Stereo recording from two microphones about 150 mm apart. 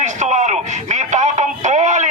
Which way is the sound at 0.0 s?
50° right (ahead or behind).